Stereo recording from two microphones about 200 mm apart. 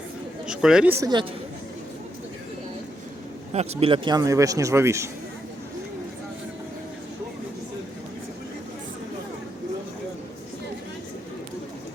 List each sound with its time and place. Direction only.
0.4 s a man's voice: 5° right (ahead or behind); by 1.3 s 20° right (ahead or behind)
3.5 s a man's voice: 30° right (ahead or behind); by 5.0 s 15° right (ahead or behind)